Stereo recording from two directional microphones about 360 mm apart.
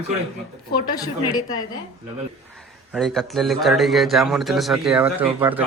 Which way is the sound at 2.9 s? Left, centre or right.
Centre.